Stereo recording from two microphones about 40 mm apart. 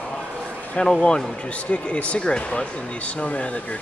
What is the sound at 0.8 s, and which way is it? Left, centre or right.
Speech, left.